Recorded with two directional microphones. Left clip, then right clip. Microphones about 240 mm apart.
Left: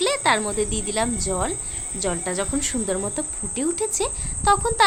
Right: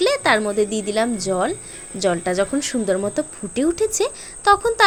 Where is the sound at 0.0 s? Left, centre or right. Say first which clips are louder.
Right 3 dB; centre.